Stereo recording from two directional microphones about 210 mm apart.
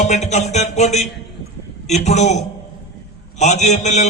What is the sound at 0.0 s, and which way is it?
A man's voice, 35° left (ahead or behind).